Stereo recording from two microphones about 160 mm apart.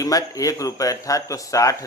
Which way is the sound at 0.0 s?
20° left (ahead or behind).